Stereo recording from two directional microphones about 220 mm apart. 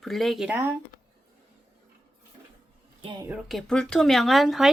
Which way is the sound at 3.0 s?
20° right (ahead or behind).